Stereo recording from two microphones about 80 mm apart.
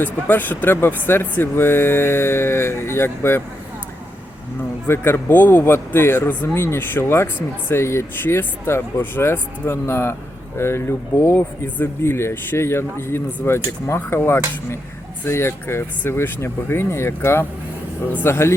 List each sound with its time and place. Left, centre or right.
0.0 s speech: left
4.9 s speech: left